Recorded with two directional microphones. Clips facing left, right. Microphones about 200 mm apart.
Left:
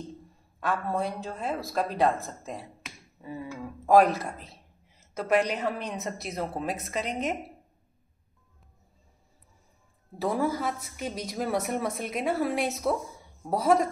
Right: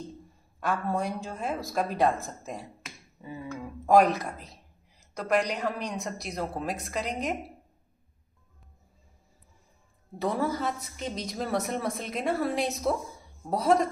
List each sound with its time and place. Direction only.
0.6 s a woman's voice: centre (ahead or behind)
10.1 s a woman's voice: 5° left (ahead or behind)